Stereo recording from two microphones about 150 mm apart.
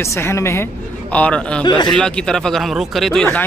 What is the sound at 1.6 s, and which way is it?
Speech, 30° left (ahead or behind).